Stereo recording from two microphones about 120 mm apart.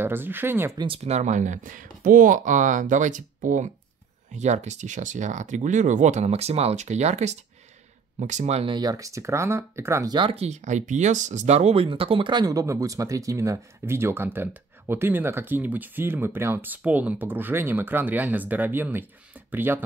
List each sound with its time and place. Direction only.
0.0 s speech: 15° right (ahead or behind)
0.7 s speech: 50° right (ahead or behind); by 3.7 s 90° right
4.3 s speech: 70° right (ahead or behind)
8.6 s speech: 35° right (ahead or behind)
10.0 s speech: 40° right (ahead or behind)
10.3 s speech: 65° right (ahead or behind); by 19.8 s 15° right (ahead or behind)